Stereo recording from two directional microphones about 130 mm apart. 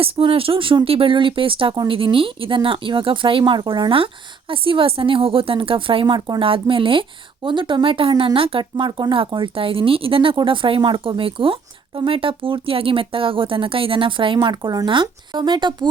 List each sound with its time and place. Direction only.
0.0 s speech: 45° right (ahead or behind)